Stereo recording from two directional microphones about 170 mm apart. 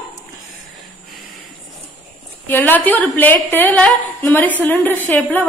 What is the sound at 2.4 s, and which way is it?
A woman's voice, 10° left (ahead or behind).